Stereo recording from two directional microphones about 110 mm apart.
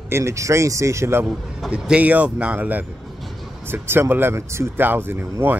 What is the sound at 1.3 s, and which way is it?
A man's voice, 5° right (ahead or behind).